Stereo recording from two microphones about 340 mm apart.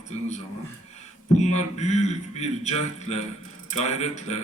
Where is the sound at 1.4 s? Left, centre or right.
Centre.